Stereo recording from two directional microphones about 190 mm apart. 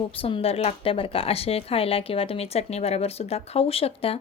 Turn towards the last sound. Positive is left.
turn(degrees=30)  # may be behind; listen again after turning